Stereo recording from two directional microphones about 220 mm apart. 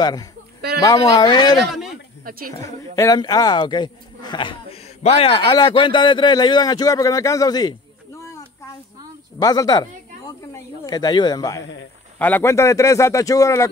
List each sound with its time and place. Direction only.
0.0 s speech: 15° left (ahead or behind)
1.7 s speech: centre (ahead or behind)
2.2 s speech: 40° right (ahead or behind)
2.6 s speech: 15° left (ahead or behind)
9.4 s speech: 15° left (ahead or behind)